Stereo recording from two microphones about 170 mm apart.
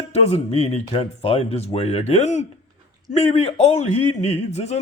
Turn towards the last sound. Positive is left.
turn(degrees=40)  # may be behind; listen again after turning